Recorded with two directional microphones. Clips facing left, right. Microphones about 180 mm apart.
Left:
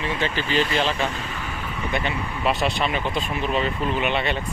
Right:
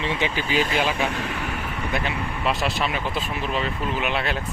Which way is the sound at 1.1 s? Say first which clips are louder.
Right 3 dB; 70° right (ahead or behind).